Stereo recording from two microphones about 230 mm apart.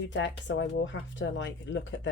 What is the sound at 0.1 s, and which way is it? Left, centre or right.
Speech, left.